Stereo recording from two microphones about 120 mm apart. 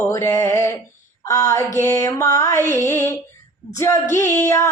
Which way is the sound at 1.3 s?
30° left (ahead or behind).